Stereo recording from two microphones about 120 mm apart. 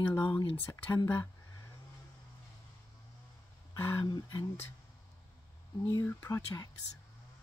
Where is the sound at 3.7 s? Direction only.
30° left (ahead or behind).